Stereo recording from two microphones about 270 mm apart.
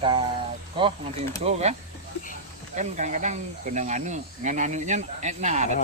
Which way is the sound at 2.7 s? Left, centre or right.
Right.